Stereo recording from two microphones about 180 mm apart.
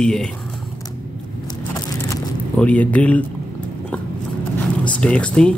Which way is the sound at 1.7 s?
20° left (ahead or behind).